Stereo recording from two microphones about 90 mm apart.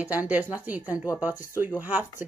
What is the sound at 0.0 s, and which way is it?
Speech, 20° right (ahead or behind).